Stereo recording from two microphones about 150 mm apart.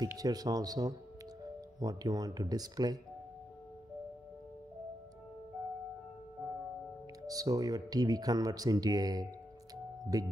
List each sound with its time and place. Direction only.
0.0 s speech: 25° right (ahead or behind)
7.2 s speech: 25° right (ahead or behind)